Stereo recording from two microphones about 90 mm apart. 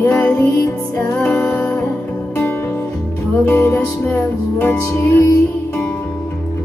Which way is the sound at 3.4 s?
20° left (ahead or behind).